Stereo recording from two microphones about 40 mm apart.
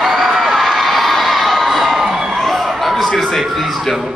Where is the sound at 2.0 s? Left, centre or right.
Centre.